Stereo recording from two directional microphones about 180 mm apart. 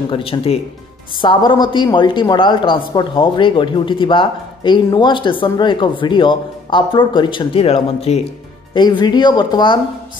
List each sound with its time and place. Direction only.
0.1 s a woman's voice: 30° left (ahead or behind)